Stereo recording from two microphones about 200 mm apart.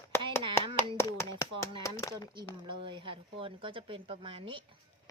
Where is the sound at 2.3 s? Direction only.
25° right (ahead or behind).